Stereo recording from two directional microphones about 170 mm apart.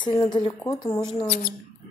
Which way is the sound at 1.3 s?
60° left (ahead or behind).